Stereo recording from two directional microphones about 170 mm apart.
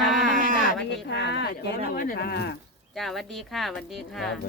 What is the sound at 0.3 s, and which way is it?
Sheep, 50° right (ahead or behind).